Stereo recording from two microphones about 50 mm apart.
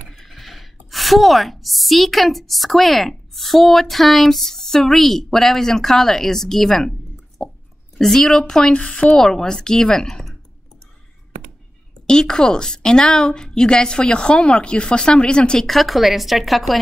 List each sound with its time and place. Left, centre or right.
0.1 s a woman's voice: centre
12.1 s a woman's voice: centre
15.6 s speech: centre